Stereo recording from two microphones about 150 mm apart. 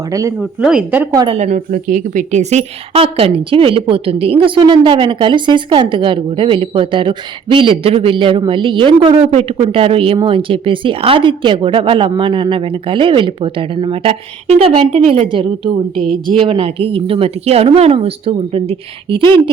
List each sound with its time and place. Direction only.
0.1 s speech: 20° right (ahead or behind)
0.3 s speech: 5° right (ahead or behind)
1.3 s a woman's voice: 50° right (ahead or behind)